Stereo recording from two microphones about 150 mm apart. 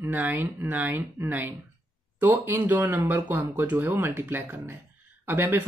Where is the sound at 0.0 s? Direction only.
15° right (ahead or behind).